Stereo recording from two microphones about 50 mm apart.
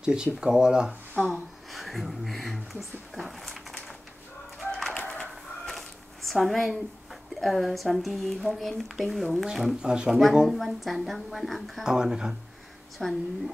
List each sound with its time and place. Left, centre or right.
0.0 s speech: centre
1.1 s speech: centre
1.7 s speech: centre
4.7 s bird: centre
5.0 s a sound: left
5.3 s a sound: centre
7.3 s speech: centre
10.5 s speech: centre
11.8 s speech: centre
13.0 s speech: centre